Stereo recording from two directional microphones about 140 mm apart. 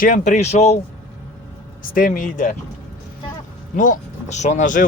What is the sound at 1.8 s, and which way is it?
Speech, 80° left.